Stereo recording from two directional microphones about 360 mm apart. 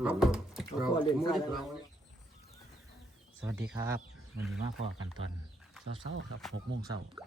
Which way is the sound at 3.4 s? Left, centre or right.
Centre.